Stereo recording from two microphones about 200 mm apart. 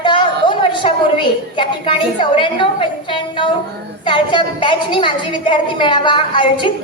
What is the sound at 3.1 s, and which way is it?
A woman's voice, 25° left (ahead or behind).